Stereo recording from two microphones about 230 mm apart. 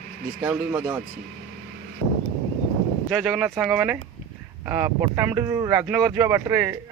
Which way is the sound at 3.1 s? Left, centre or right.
Centre.